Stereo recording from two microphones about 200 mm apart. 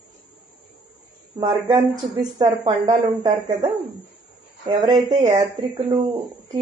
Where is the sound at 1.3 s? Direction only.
20° right (ahead or behind).